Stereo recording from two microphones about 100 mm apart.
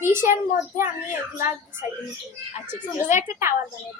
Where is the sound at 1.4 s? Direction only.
20° right (ahead or behind).